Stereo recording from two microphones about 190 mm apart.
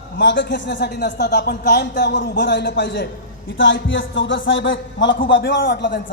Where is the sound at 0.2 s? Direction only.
70° left (ahead or behind).